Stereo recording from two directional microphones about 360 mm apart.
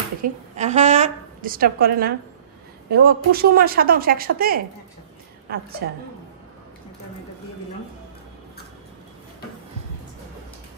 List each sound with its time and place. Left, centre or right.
0.2 s a woman's voice: centre